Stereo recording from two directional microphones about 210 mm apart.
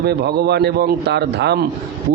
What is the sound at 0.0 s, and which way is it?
A man's voice, 50° right (ahead or behind).